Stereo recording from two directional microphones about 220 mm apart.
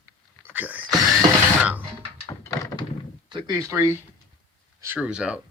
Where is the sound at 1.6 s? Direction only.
5° right (ahead or behind).